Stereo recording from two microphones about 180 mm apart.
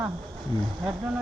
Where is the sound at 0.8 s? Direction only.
5° right (ahead or behind).